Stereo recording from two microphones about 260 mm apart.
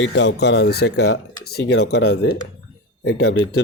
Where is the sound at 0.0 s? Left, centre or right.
Left.